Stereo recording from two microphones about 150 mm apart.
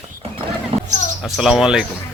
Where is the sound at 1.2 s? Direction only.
Centre (ahead or behind).